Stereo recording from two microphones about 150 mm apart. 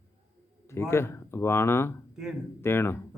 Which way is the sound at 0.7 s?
15° left (ahead or behind).